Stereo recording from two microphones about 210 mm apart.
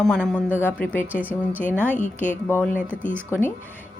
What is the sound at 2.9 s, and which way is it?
Speech, 10° right (ahead or behind).